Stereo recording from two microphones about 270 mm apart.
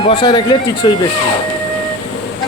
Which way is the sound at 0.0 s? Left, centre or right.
Centre.